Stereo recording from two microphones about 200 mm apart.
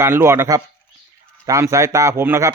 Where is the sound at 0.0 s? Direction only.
10° right (ahead or behind).